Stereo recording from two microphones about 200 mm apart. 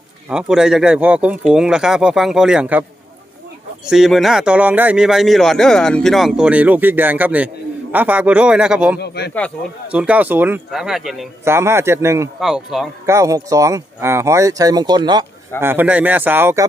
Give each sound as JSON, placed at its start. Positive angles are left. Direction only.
{"t": 0.3, "sound": "a man's voice", "side_deg": -5}
{"t": 3.8, "sound": "a man's voice", "side_deg": 0}
{"t": 9.0, "sound": "speech", "side_deg": 55}
{"t": 9.9, "sound": "a man's voice", "side_deg": -5}
{"t": 11.4, "sound": "speech", "side_deg": -15}
{"t": 12.4, "sound": "a man's voice", "side_deg": 0}
{"t": 13.1, "sound": "speech", "side_deg": -15}
{"t": 15.6, "sound": "speech", "side_deg": -10}